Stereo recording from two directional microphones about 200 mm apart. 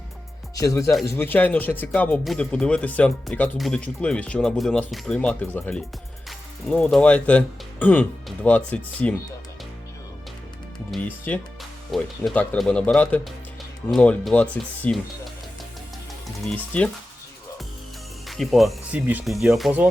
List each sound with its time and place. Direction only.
0.5 s speech: 15° left (ahead or behind)
10.9 s speech: 5° left (ahead or behind)
16.5 s speech: 5° left (ahead or behind)
18.3 s speech: centre (ahead or behind)